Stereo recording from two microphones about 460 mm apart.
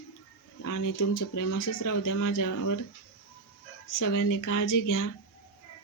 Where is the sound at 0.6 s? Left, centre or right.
Left.